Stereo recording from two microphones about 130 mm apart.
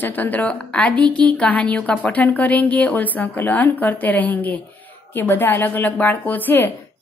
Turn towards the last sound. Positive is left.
turn(degrees=15)  # may be behind; listen again after turning